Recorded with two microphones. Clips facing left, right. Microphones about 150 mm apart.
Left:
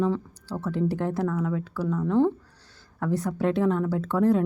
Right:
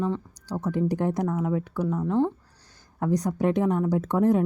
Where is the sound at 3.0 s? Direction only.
15° right (ahead or behind).